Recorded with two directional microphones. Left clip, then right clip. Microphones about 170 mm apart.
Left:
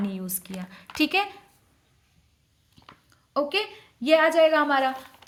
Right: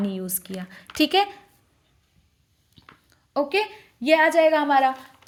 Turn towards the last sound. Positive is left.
turn(degrees=-25)  # may be behind; listen again after turning